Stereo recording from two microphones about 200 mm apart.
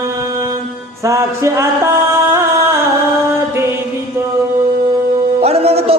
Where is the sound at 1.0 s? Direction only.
15° right (ahead or behind).